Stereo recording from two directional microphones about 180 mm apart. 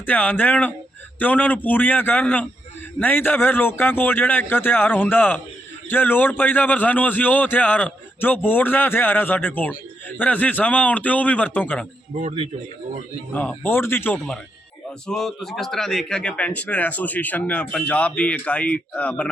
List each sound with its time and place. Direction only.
0.0 s a man's voice: 10° left (ahead or behind)
12.1 s a man's voice: 35° right (ahead or behind)
13.3 s a man's voice: 10° left (ahead or behind)